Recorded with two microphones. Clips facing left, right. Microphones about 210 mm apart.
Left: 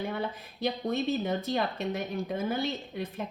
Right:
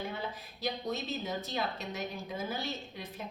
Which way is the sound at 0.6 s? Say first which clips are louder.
Left 6 dB; 55° left (ahead or behind).